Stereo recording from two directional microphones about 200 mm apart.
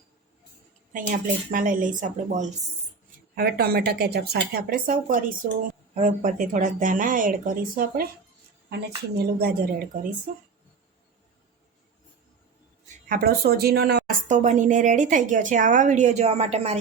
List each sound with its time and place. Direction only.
1.5 s a woman's voice: 40° right (ahead or behind)
3.3 s speech: 50° right (ahead or behind)
13.1 s speech: 50° right (ahead or behind)
14.3 s a woman's voice: 35° right (ahead or behind)